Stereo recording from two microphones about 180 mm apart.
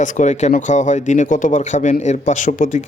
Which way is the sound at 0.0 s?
40° left (ahead or behind).